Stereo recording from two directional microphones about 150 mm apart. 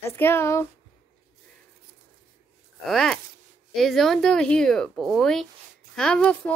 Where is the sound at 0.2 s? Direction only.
15° left (ahead or behind).